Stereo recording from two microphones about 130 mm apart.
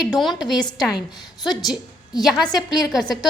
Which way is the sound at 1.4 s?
35° left (ahead or behind).